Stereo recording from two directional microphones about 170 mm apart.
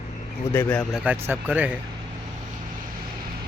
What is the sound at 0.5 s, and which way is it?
Speech, 10° left (ahead or behind).